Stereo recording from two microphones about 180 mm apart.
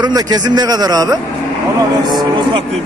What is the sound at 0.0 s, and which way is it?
A man's voice, 20° right (ahead or behind).